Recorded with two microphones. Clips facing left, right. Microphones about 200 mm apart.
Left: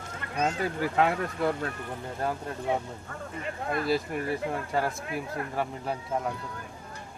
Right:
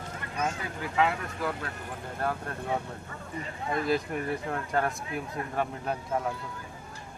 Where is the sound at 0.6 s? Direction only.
45° left (ahead or behind).